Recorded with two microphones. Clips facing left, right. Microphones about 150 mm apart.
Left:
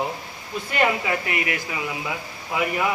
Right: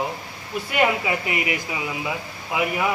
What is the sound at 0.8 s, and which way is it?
Speech, 15° right (ahead or behind).